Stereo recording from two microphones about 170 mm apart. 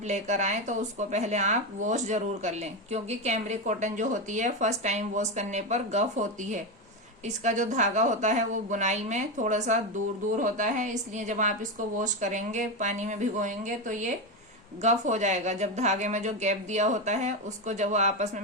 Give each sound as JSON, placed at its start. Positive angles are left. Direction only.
{"t": 0.0, "sound": "speech", "side_deg": -45}